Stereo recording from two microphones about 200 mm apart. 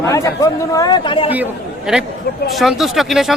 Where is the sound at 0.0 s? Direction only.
15° left (ahead or behind).